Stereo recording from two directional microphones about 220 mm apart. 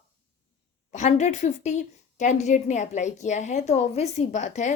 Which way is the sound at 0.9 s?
30° left (ahead or behind).